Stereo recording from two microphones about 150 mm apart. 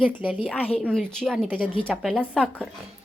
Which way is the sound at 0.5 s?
10° left (ahead or behind).